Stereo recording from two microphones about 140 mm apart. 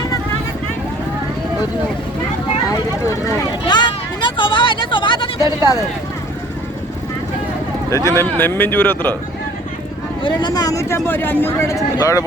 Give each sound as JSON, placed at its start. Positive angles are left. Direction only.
{"t": 2.7, "sound": "speech", "side_deg": 20}
{"t": 3.7, "sound": "a sound", "side_deg": 30}
{"t": 7.9, "sound": "speech", "side_deg": 20}
{"t": 10.2, "sound": "speech", "side_deg": 30}